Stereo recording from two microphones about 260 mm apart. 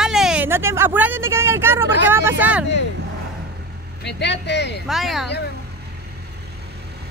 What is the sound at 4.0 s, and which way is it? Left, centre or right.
Speech, left.